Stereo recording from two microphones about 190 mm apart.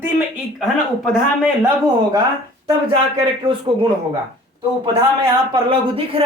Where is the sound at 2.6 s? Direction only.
25° right (ahead or behind).